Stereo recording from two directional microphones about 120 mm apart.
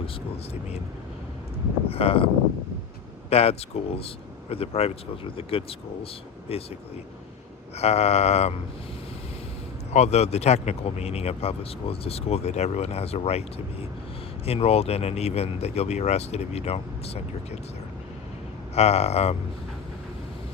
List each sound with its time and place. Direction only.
1.9 s speech: 50° left (ahead or behind)
7.8 s speech: 60° left (ahead or behind)
9.9 s speech: 65° left (ahead or behind)
14.4 s speech: 55° left (ahead or behind)
18.7 s speech: 60° left (ahead or behind)